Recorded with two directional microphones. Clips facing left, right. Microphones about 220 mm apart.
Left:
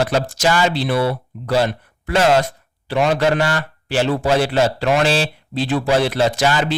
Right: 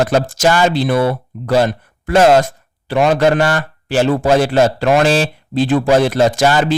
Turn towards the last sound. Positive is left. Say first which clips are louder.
# right 4 dB
turn(degrees=-45)  # may be behind; listen again after turning